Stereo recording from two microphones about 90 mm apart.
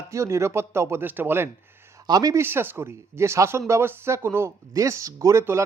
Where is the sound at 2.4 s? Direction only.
25° right (ahead or behind).